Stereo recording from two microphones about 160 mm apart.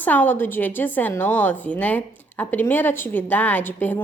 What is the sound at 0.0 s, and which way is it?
A woman's voice, 10° left (ahead or behind).